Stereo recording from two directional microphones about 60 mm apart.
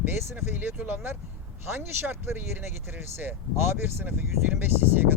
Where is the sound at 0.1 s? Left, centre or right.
Right.